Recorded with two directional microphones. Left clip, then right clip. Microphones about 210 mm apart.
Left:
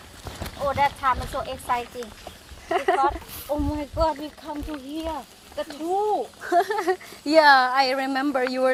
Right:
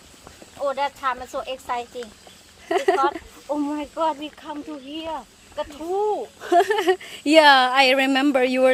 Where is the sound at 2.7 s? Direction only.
50° right (ahead or behind).